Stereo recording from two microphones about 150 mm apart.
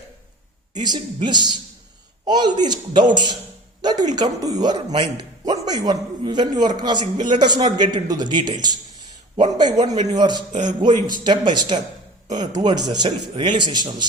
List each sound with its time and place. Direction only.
0.8 s a man's voice: 30° right (ahead or behind)
3.8 s a sound: 30° right (ahead or behind)
4.1 s a man's voice: 25° right (ahead or behind)